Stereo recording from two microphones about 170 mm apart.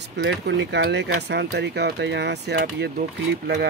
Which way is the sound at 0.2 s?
90° right.